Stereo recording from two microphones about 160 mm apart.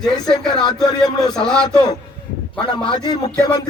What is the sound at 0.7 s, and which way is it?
Speech, 25° left (ahead or behind).